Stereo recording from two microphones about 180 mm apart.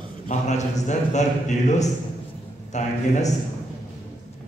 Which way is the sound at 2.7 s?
40° left (ahead or behind).